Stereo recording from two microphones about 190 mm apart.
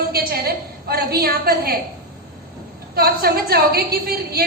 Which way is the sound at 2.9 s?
55° right (ahead or behind).